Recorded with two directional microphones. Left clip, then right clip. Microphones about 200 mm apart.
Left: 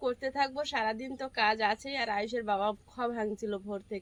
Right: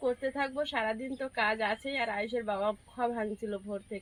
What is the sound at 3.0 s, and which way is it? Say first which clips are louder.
Speech: even; 20° left (ahead or behind).